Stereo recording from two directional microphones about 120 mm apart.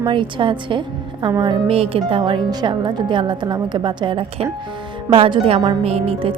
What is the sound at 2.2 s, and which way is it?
A woman's voice, 40° right (ahead or behind).